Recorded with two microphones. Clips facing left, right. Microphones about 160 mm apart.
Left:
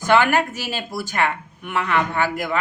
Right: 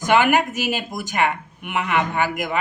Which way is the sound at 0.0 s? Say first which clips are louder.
Even; 15° right (ahead or behind).